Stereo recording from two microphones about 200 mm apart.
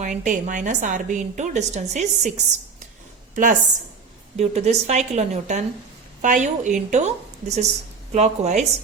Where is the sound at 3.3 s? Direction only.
40° right (ahead or behind).